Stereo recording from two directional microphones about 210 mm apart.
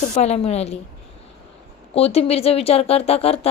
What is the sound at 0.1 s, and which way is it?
Speech, 30° left (ahead or behind).